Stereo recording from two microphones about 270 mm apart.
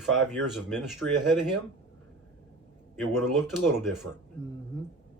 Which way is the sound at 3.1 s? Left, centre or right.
Centre.